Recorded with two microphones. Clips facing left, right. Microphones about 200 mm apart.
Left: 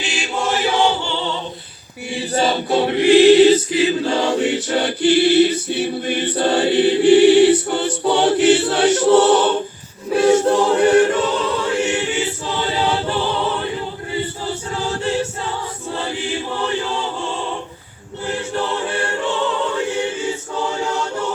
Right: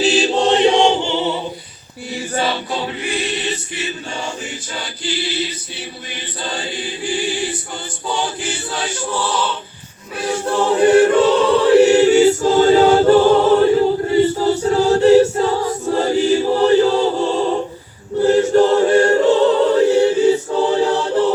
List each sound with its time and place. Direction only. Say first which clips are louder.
0.0 s chant: right 8 dB; 35° right (ahead or behind)
2.3 s chant: left 3 dB; 45° left (ahead or behind)
2.7 s choir: left 11 dB; 65° left (ahead or behind)
10.2 s choir: left 7 dB; 25° left (ahead or behind)
11.5 s choir: right 10 dB; 35° right (ahead or behind)